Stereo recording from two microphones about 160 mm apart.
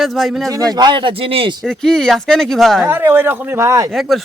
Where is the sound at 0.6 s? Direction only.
25° right (ahead or behind).